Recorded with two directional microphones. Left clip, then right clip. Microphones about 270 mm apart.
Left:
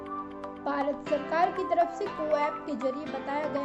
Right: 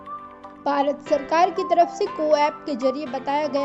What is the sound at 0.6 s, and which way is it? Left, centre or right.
Speech, right.